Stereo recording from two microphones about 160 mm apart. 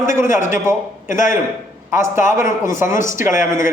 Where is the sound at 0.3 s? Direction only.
55° left (ahead or behind).